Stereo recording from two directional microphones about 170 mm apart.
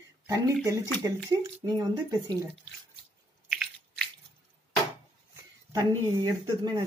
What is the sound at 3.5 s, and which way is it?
Biting, centre (ahead or behind).